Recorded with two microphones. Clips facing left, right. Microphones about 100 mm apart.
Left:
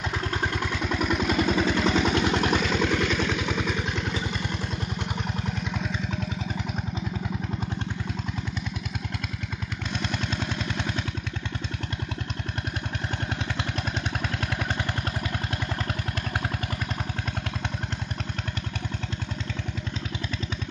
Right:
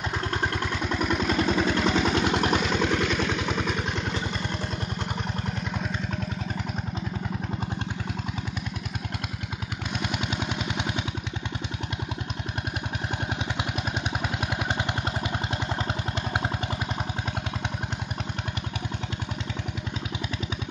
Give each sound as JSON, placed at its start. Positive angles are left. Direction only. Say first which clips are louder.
{"t": 0.1, "sound": "vehicle", "louder": "right 1 dB", "side_deg": 0}
{"t": 9.9, "sound": "gunshot", "louder": "right 1 dB", "side_deg": -10}
{"t": 13.6, "sound": "vehicle", "louder": "right 1 dB", "side_deg": -15}